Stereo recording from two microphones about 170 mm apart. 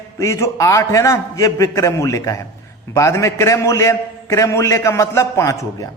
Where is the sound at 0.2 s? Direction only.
15° left (ahead or behind).